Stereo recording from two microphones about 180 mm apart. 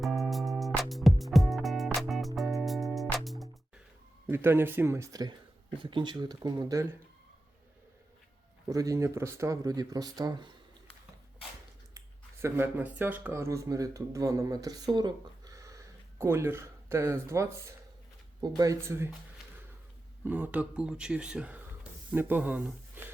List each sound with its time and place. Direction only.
0.0 s music: centre (ahead or behind)
4.3 s speech: 15° right (ahead or behind)
8.7 s speech: 20° right (ahead or behind)
11.9 s speech: 15° right (ahead or behind)
20.2 s speech: 10° right (ahead or behind)